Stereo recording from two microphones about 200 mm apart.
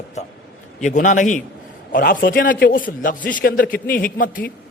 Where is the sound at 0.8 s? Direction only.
40° left (ahead or behind).